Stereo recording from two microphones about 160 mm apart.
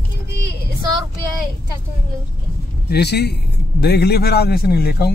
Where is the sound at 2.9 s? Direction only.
90° left.